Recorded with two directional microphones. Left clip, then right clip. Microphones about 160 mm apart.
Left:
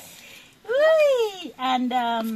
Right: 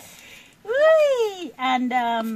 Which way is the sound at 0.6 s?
5° right (ahead or behind).